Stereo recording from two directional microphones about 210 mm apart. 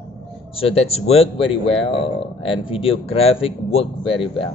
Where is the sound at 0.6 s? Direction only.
30° left (ahead or behind).